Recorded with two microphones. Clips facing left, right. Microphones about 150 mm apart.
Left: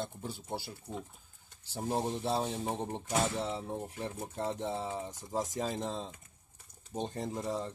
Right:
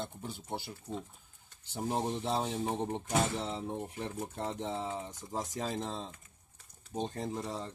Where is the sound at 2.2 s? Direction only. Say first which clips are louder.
Even; 5° left (ahead or behind).